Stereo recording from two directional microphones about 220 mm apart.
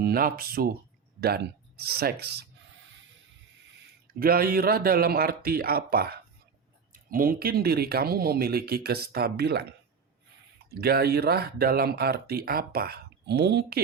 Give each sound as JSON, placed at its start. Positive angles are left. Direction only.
{"t": 0.0, "sound": "speech", "side_deg": -40}
{"t": 4.2, "sound": "speech", "side_deg": -40}